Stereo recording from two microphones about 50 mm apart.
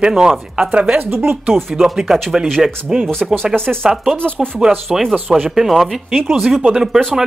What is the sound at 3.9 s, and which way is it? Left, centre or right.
Speech, centre.